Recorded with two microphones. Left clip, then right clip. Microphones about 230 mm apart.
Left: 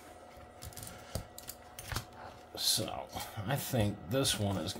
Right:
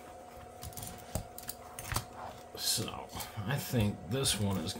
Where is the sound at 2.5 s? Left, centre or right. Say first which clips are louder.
Left 3 dB; left.